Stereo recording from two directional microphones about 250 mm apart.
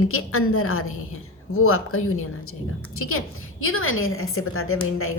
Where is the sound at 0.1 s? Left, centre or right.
Left.